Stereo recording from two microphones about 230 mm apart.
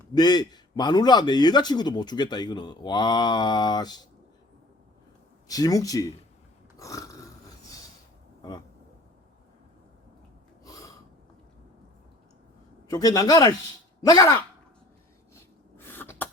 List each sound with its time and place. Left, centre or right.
0.1 s a man's voice: centre
5.5 s a man's voice: centre
6.7 s a sound: centre
10.6 s gasp: centre
12.9 s a man's voice: centre
15.8 s throat clearing: centre